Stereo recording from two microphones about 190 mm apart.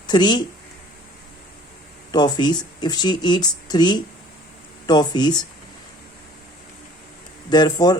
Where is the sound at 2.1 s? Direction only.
20° left (ahead or behind).